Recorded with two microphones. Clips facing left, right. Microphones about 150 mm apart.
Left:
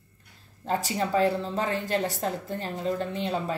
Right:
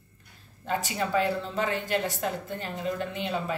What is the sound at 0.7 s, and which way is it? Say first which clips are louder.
Speech: left 2 dB; 35° left (ahead or behind).